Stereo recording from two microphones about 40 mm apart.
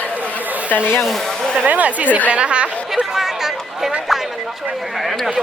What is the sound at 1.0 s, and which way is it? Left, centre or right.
Speech, centre.